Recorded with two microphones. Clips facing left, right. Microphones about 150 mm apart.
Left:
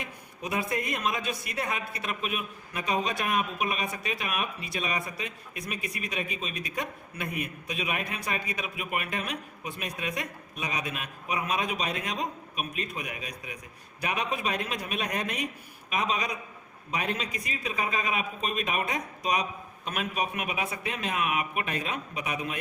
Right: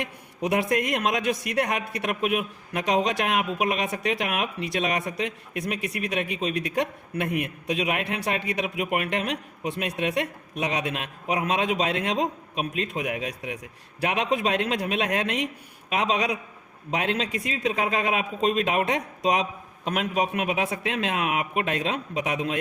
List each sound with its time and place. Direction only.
0.0 s a man's voice: 75° right (ahead or behind)